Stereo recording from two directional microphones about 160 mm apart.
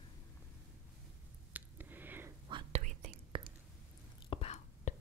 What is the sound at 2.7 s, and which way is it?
Whispering, 50° right (ahead or behind).